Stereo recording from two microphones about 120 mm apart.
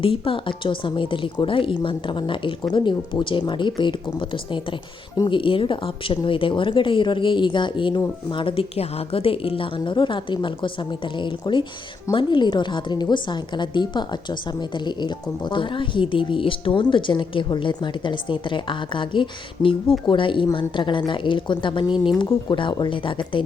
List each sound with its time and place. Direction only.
0.0 s a woman's voice: 50° left (ahead or behind); by 5.4 s 35° left (ahead or behind)
5.4 s a woman's voice: 45° left (ahead or behind)